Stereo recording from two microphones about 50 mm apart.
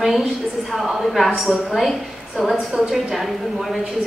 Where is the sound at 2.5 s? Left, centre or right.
Right.